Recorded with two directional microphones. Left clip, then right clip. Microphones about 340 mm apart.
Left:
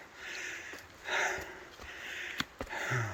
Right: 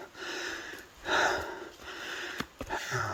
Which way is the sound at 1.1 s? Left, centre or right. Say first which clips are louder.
Right 5 dB; centre.